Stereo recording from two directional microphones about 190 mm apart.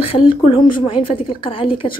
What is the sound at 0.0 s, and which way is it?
A woman's voice, 30° left (ahead or behind).